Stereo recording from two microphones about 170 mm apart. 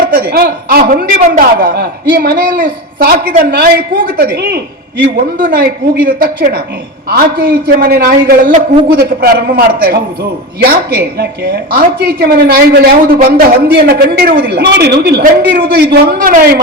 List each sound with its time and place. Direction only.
0.1 s a man's voice: 65° right (ahead or behind)